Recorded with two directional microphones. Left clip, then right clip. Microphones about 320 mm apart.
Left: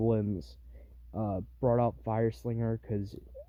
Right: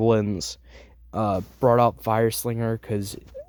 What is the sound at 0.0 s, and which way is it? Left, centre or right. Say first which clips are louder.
Speech: right 10 dB; centre.